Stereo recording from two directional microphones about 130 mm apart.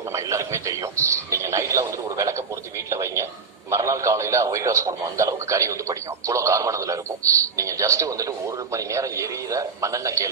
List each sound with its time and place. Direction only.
0.1 s a man's voice: 25° right (ahead or behind)